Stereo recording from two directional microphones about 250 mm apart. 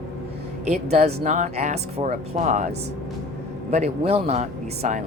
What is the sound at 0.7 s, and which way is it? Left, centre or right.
Speech, right.